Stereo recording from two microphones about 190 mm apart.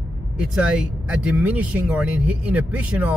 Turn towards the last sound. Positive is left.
turn(degrees=-10)  # may be behind; listen again after turning